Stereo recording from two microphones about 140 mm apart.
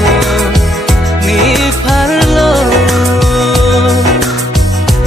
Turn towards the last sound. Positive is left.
turn(degrees=0)  # may be behind; listen again after turning